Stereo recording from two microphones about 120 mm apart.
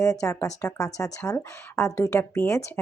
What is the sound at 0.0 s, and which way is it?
Speech, 30° left (ahead or behind).